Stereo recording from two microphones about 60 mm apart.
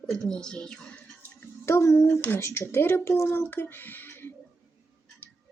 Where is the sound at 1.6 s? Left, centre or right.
Left.